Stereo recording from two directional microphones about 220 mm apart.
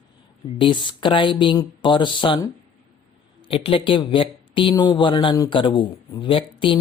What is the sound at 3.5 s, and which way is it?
Speech, 25° left (ahead or behind).